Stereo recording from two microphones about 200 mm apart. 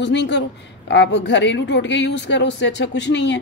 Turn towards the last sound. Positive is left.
turn(degrees=60)  # may be behind; listen again after turning